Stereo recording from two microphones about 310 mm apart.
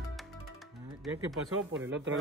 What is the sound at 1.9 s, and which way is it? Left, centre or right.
Speech, right.